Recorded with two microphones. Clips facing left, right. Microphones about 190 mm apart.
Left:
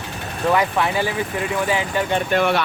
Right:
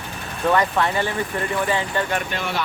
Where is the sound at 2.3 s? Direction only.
60° left (ahead or behind).